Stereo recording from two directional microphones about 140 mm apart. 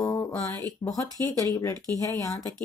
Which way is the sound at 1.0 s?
25° right (ahead or behind).